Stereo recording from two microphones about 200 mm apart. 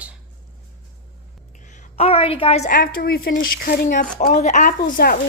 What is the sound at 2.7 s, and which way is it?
Speech, 50° left (ahead or behind).